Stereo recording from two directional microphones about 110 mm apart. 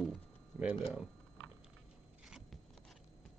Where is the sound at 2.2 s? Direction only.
5° right (ahead or behind).